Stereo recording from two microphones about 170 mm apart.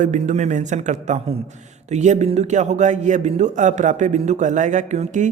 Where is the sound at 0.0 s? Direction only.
45° right (ahead or behind).